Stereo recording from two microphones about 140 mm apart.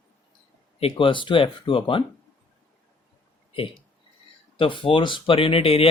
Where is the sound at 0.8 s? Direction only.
35° left (ahead or behind).